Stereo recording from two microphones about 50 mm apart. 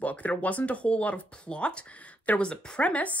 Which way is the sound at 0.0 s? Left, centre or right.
Left.